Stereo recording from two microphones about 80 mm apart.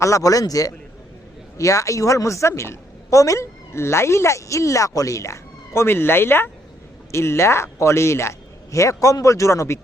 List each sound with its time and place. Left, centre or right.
0.0 s a man's voice: left